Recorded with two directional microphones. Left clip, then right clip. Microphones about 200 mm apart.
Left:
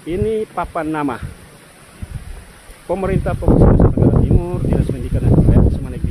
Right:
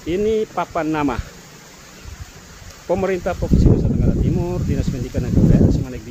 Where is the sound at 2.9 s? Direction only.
Centre (ahead or behind).